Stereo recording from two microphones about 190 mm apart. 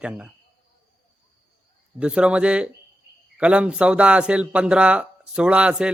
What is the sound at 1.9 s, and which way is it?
Speech, 5° right (ahead or behind).